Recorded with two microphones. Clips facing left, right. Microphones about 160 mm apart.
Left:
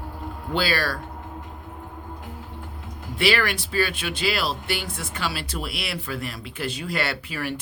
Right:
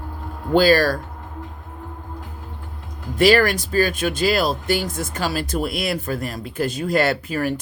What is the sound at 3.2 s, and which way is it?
Speech, 40° right (ahead or behind).